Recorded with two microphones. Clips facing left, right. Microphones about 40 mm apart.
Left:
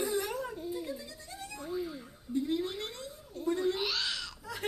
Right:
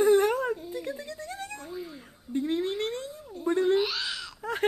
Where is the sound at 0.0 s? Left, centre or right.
Right.